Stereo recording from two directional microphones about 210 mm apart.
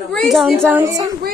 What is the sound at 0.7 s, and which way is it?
Speech, 15° right (ahead or behind).